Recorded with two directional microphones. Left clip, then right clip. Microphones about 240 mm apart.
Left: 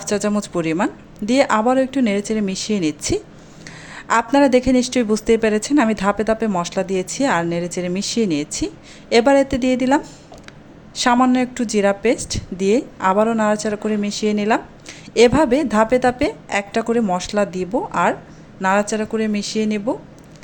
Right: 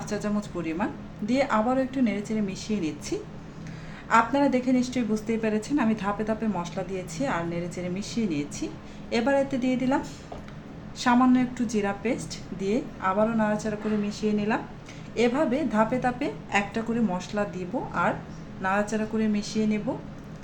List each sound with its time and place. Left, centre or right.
0.0 s a woman's voice: left